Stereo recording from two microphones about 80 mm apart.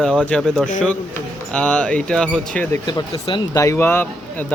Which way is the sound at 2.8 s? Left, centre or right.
Left.